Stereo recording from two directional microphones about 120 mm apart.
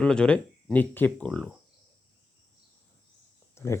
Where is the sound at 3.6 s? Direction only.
20° left (ahead or behind).